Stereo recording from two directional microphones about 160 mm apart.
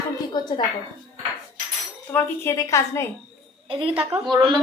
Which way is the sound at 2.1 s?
15° left (ahead or behind).